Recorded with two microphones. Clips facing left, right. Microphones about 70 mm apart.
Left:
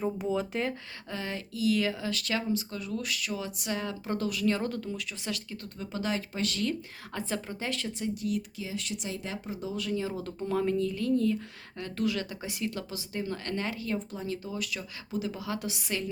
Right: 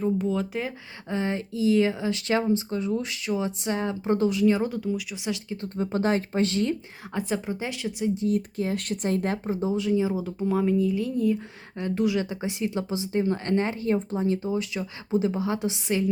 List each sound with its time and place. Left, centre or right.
0.0 s speech: centre
1.1 s speech: right
5.7 s speech: right; by 8.1 s centre
8.1 s speech: right
8.4 s speech: right
9.8 s speech: centre